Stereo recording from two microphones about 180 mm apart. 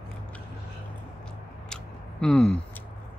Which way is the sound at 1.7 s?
5° left (ahead or behind).